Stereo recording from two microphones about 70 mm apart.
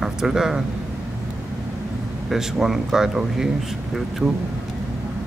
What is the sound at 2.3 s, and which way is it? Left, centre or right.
Speech, centre.